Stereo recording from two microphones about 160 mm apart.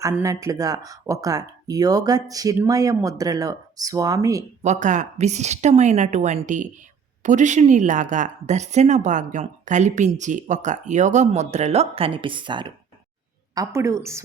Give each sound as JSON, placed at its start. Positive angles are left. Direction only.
{"t": 0.0, "sound": "speech", "side_deg": -20}
{"t": 4.6, "sound": "a woman's voice", "side_deg": -50}